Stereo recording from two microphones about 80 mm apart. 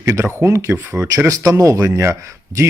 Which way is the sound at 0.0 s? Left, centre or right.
Right.